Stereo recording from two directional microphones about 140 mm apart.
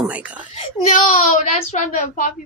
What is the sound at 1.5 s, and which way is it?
Speech, 60° left (ahead or behind).